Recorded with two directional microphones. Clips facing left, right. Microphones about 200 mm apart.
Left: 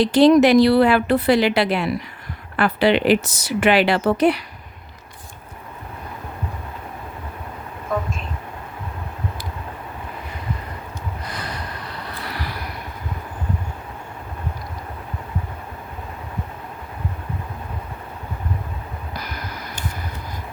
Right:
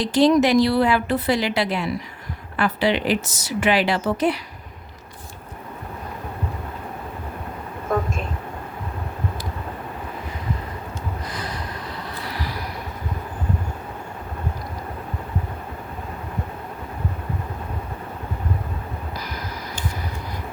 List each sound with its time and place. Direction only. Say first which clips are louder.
0.0 s speech: left 4 dB; 65° left (ahead or behind)
11.3 s snort: even; 65° left (ahead or behind)
19.1 s vehicle: even; 60° left (ahead or behind)